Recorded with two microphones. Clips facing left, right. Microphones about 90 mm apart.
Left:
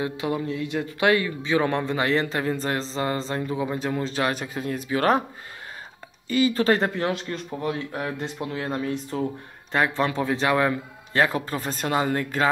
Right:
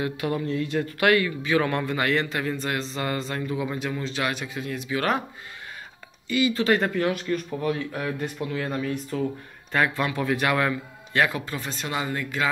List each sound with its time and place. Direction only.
0.0 s speech: 20° left (ahead or behind); by 5.2 s 35° left (ahead or behind)
6.2 s speech: 40° left (ahead or behind); by 10.7 s 25° left (ahead or behind)
10.7 s speech: 35° left (ahead or behind)